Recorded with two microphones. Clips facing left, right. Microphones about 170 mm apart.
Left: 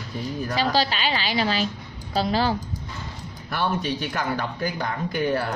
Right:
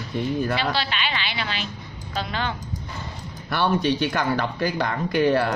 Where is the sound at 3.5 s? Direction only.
75° right (ahead or behind).